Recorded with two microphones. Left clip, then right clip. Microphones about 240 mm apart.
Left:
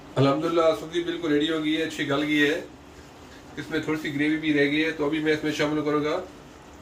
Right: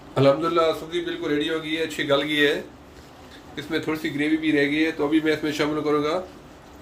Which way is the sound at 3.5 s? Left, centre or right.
Right.